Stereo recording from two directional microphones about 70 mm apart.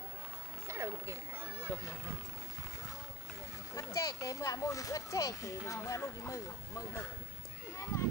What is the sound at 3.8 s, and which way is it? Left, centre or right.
Speech, left.